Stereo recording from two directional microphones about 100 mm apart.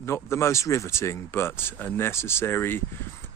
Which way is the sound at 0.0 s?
25° left (ahead or behind).